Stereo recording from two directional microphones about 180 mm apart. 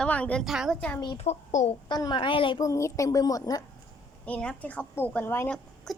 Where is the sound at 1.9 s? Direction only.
20° left (ahead or behind).